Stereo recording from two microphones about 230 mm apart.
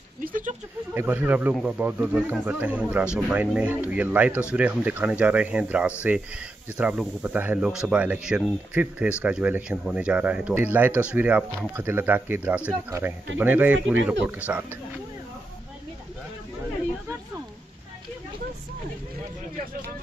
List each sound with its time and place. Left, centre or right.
0.2 s speech: right
0.9 s speech: centre